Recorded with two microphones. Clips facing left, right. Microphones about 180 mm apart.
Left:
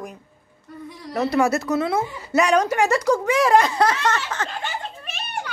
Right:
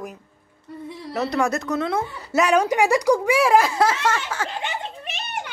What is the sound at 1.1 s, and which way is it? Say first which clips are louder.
A woman's voice: left 3 dB; centre (ahead or behind).